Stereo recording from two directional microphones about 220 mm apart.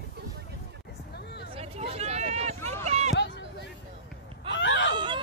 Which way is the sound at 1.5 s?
25° right (ahead or behind).